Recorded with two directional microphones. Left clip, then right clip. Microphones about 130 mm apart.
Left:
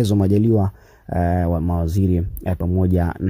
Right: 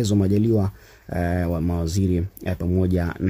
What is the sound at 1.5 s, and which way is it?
Speech, 25° left (ahead or behind).